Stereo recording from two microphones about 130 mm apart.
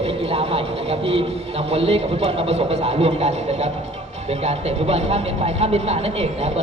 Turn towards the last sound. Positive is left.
turn(degrees=-55)  # may be behind; listen again after turning